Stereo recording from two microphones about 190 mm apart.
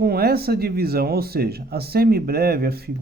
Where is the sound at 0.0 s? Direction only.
55° right (ahead or behind).